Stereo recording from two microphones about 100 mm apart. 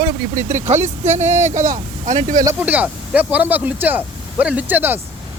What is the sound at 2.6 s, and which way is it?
Speech, 15° right (ahead or behind).